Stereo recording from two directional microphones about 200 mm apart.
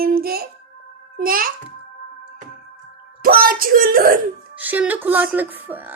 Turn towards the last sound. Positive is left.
turn(degrees=-10)  # may be behind; listen again after turning